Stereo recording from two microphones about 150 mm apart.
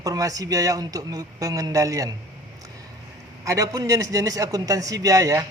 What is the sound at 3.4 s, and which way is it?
A man's voice, 20° right (ahead or behind).